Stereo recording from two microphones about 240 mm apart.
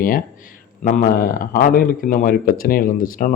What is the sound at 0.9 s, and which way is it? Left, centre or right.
Speech, left.